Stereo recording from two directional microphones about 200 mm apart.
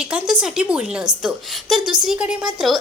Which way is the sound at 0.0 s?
5° right (ahead or behind).